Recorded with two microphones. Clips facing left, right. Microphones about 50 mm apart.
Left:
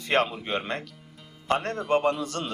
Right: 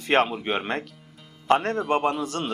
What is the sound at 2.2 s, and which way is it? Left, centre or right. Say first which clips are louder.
Speech: right 3 dB; right.